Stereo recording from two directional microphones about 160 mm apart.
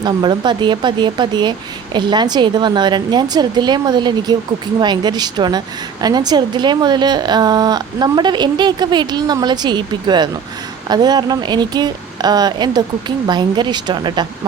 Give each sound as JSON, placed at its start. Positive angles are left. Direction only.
{"t": 0.0, "sound": "a woman's voice", "side_deg": -30}